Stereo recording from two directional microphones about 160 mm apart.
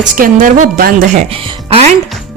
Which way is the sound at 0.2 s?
55° right (ahead or behind).